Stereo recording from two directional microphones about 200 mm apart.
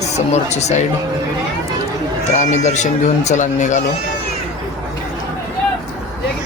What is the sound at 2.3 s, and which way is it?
Speech, 35° left (ahead or behind).